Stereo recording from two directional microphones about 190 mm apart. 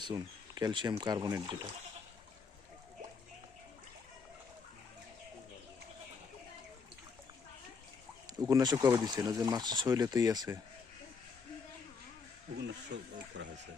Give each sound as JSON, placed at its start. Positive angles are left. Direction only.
{"t": 0.0, "sound": "speech", "side_deg": -20}
{"t": 8.4, "sound": "speech", "side_deg": -20}
{"t": 12.5, "sound": "speech", "side_deg": -65}